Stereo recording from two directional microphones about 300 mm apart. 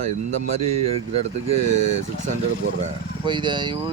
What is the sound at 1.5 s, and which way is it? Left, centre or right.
Speech, right.